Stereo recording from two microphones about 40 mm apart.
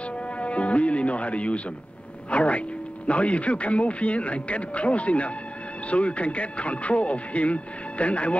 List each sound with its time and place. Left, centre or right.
0.4 s speech: left